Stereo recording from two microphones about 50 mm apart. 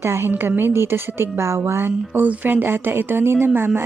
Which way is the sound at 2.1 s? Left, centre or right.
Right.